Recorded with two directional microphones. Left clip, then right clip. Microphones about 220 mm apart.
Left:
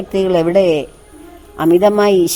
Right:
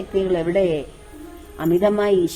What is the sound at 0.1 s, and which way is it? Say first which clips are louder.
A woman's voice: left 7 dB; 40° left (ahead or behind).